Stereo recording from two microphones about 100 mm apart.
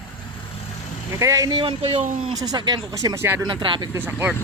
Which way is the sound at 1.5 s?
55° right (ahead or behind).